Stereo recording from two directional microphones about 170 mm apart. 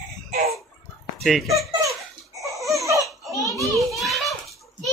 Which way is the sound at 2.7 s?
20° right (ahead or behind).